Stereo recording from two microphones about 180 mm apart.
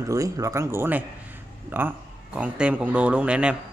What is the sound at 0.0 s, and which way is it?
A man's voice, 20° right (ahead or behind).